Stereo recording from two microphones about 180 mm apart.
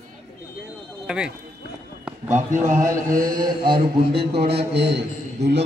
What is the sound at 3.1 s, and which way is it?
Mantra, 50° right (ahead or behind).